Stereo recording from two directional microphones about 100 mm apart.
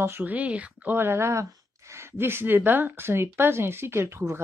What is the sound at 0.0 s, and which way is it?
Speech, 20° right (ahead or behind).